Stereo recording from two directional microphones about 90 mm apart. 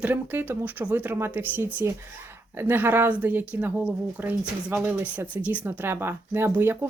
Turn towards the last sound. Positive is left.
turn(degrees=-25)  # may be behind; listen again after turning